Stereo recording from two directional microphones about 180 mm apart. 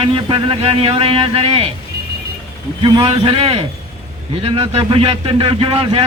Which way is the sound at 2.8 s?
30° right (ahead or behind).